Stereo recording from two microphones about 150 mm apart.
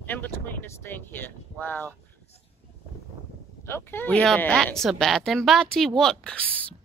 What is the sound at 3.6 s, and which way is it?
Speech, 15° left (ahead or behind).